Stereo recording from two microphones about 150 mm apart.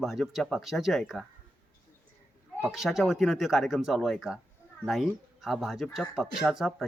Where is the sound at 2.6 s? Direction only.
Centre (ahead or behind).